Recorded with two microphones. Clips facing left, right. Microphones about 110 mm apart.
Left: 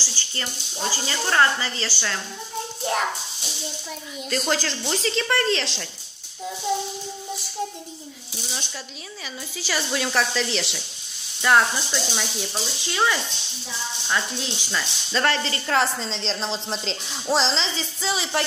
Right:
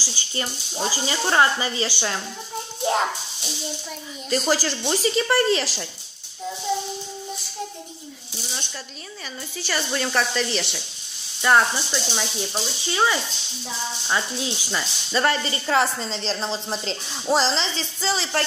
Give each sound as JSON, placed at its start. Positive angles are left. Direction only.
{"t": 0.0, "sound": "a sound", "side_deg": -15}
{"t": 0.8, "sound": "speech", "side_deg": -15}
{"t": 4.4, "sound": "speech", "side_deg": -5}
{"t": 9.6, "sound": "speech", "side_deg": 0}